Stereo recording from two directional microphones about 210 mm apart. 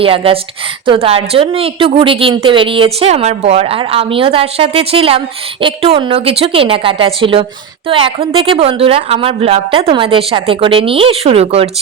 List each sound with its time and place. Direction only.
0.0 s a woman's voice: 25° right (ahead or behind)